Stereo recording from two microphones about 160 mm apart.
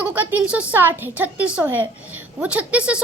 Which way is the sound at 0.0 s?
10° right (ahead or behind).